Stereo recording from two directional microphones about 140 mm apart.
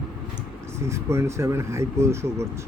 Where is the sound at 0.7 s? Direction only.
20° right (ahead or behind).